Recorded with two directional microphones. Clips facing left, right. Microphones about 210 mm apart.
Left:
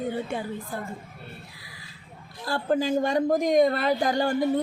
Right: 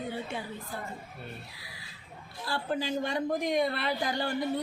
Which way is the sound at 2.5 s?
45° left (ahead or behind).